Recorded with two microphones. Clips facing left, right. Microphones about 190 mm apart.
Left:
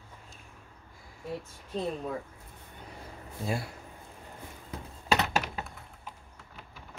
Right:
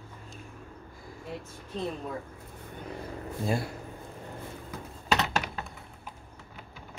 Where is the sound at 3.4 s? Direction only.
Centre (ahead or behind).